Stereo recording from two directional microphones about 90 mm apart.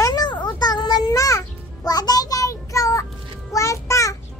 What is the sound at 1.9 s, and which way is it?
Child singing, 45° left (ahead or behind).